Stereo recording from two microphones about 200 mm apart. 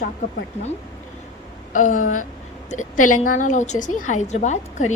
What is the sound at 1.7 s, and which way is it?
A woman's voice, 40° left (ahead or behind).